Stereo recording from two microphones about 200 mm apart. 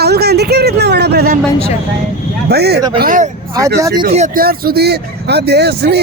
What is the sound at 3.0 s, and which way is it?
Speech, 40° right (ahead or behind).